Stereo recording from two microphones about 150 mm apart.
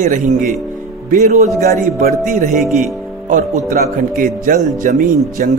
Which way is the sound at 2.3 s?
60° right (ahead or behind).